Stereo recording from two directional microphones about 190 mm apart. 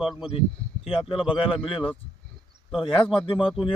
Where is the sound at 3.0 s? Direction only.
30° left (ahead or behind).